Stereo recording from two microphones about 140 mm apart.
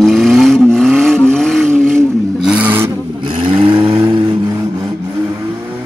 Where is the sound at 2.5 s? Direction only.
10° right (ahead or behind).